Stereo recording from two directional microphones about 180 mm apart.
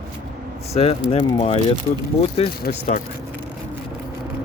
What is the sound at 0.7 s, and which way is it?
Speech, 35° left (ahead or behind).